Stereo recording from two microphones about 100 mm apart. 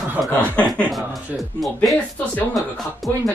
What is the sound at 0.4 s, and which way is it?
Speech, 15° left (ahead or behind).